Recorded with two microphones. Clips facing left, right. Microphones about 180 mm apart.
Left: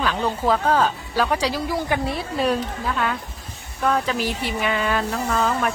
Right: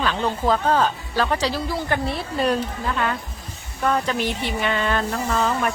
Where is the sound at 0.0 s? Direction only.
5° left (ahead or behind).